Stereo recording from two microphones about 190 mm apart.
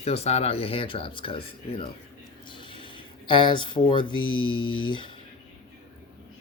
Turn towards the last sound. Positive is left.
turn(degrees=25)  # may be behind; listen again after turning